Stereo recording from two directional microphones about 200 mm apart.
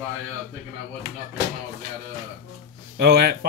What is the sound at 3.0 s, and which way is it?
Speech, 55° right (ahead or behind).